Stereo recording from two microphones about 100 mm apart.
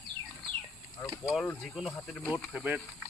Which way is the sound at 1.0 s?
20° left (ahead or behind).